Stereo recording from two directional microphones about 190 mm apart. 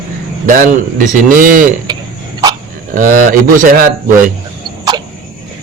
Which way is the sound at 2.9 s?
45° right (ahead or behind).